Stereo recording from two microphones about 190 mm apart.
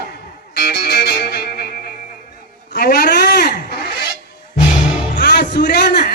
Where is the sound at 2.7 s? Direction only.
55° left (ahead or behind).